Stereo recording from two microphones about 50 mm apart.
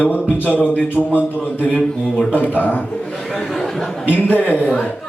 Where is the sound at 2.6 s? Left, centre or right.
Left.